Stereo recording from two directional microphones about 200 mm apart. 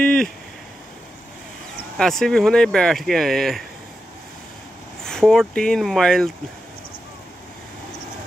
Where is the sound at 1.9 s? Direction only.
Centre (ahead or behind).